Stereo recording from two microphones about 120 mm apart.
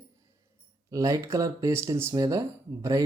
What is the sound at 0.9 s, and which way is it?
Speech, 25° right (ahead or behind).